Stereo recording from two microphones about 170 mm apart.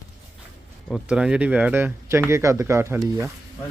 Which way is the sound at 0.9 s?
Centre (ahead or behind).